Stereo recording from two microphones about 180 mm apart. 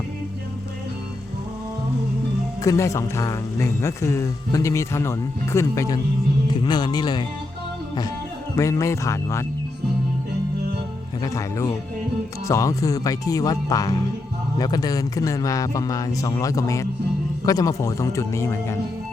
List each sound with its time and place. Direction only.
2.6 s a man's voice: 15° left (ahead or behind)
8.5 s a man's voice: 15° left (ahead or behind)
11.2 s a man's voice: 20° left (ahead or behind)